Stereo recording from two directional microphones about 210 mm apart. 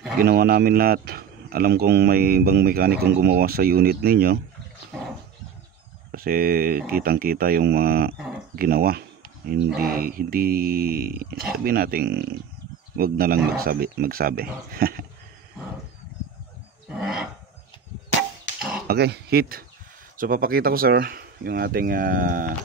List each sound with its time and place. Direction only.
0.2 s speech: 45° right (ahead or behind)
6.1 s speech: 45° right (ahead or behind)
16.9 s wild animals: 5° right (ahead or behind)
18.6 s pig: centre (ahead or behind)
18.9 s speech: 50° right (ahead or behind)